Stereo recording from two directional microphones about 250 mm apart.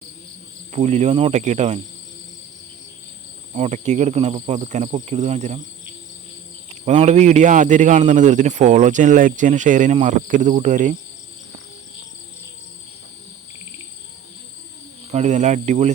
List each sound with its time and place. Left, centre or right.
0.7 s a man's voice: right
3.5 s a man's voice: right
6.7 s a man's voice: right
15.1 s a man's voice: right